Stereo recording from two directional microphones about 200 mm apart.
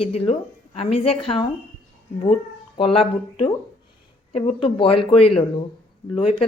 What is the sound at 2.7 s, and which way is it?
Speech, 25° left (ahead or behind).